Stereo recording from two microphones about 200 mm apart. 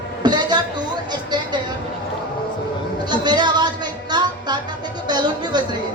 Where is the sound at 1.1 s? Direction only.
20° right (ahead or behind).